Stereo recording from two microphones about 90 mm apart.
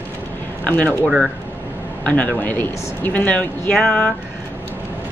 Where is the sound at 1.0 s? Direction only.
5° right (ahead or behind).